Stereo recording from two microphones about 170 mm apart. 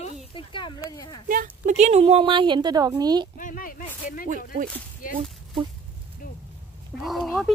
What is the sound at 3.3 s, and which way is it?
Speech, 55° left (ahead or behind).